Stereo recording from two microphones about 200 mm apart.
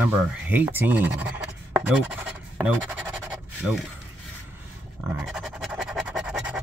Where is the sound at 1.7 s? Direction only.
10° right (ahead or behind).